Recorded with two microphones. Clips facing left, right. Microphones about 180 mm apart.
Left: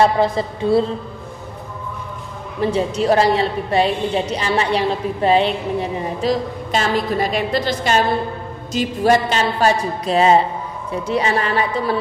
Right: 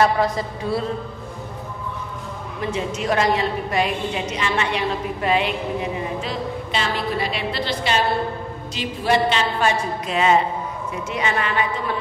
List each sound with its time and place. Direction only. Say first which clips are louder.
0.0 s a woman's voice: left 3 dB; 25° left (ahead or behind)
2.6 s a woman's voice: left 7 dB; 35° left (ahead or behind)